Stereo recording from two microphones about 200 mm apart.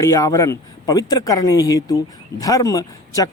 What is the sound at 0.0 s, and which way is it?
Speech, 15° left (ahead or behind).